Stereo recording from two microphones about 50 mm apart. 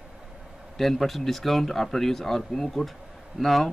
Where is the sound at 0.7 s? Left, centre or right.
Centre.